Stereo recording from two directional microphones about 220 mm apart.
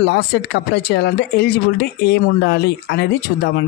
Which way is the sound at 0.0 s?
50° left (ahead or behind).